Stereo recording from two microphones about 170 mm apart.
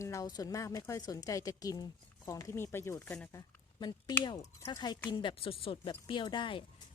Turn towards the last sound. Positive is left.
turn(degrees=30)  # may be behind; listen again after turning